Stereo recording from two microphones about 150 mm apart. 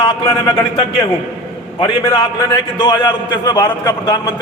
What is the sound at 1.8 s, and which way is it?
A man's voice, 30° left (ahead or behind).